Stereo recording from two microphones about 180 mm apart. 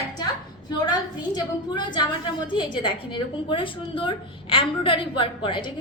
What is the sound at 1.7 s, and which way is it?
A woman's voice, 25° left (ahead or behind).